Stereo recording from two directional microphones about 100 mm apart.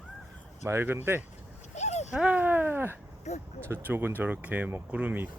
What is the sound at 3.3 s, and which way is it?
Speech, 90° left.